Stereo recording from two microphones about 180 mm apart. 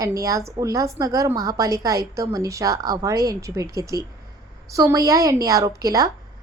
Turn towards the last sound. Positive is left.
turn(degrees=-20)  # may be behind; listen again after turning